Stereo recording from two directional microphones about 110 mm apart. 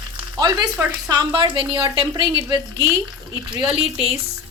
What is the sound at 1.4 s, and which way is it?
Speech, 50° right (ahead or behind).